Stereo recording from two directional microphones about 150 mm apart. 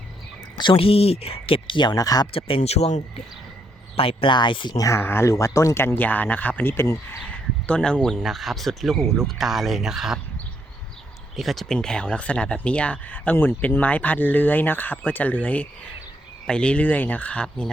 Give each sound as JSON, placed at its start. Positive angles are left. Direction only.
{"t": 0.6, "sound": "speech", "side_deg": 35}
{"t": 2.6, "sound": "speech", "side_deg": 45}
{"t": 7.7, "sound": "speech", "side_deg": 5}
{"t": 11.3, "sound": "speech", "side_deg": 0}